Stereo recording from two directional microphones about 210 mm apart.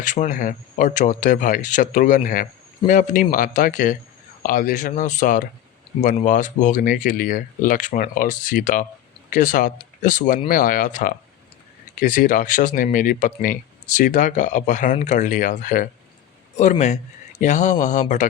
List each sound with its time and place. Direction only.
0.0 s speech: 35° left (ahead or behind)